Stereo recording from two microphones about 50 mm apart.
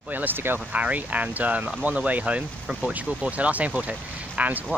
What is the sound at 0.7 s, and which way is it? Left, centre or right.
Speech, right.